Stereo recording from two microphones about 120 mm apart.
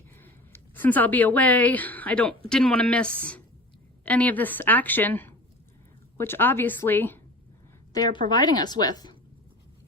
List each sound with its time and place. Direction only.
0.2 s a woman's voice: 15° left (ahead or behind)
7.9 s a woman's voice: 35° left (ahead or behind)